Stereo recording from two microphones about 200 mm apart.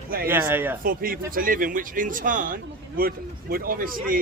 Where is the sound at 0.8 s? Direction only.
45° right (ahead or behind).